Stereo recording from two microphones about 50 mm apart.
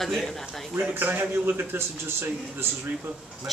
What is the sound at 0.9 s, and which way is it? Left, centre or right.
A man's voice, right.